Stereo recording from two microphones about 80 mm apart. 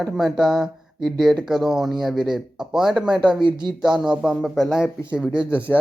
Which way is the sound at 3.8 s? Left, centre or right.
Centre.